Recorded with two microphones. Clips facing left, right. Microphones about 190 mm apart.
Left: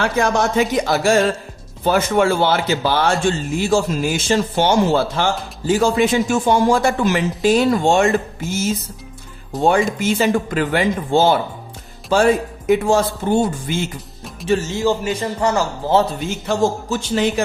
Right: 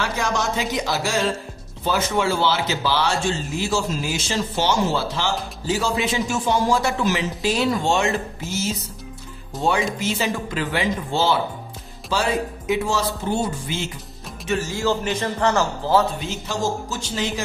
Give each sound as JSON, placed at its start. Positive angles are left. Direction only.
{"t": 0.0, "sound": "a man's voice", "side_deg": 55}
{"t": 14.4, "sound": "speech", "side_deg": 30}
{"t": 15.0, "sound": "speech", "side_deg": 10}
{"t": 16.2, "sound": "a man's voice", "side_deg": 55}